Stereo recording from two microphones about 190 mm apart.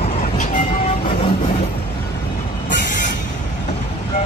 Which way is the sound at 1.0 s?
30° left (ahead or behind).